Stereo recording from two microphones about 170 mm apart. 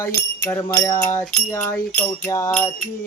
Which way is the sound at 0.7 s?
15° left (ahead or behind).